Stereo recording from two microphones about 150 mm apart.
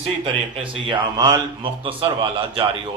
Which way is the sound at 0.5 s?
35° right (ahead or behind).